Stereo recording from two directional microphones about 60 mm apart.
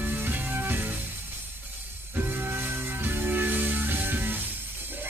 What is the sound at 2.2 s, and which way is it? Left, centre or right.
Music, right.